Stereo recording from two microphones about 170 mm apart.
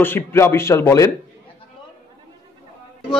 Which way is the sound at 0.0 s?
15° left (ahead or behind).